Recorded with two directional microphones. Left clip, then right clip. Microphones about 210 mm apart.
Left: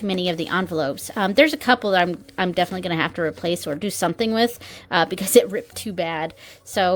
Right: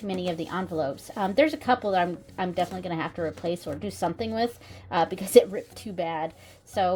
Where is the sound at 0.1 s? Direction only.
35° left (ahead or behind).